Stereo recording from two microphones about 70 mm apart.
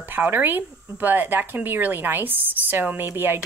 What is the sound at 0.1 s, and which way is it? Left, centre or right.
Speech, right.